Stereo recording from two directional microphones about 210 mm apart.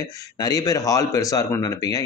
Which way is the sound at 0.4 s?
15° left (ahead or behind).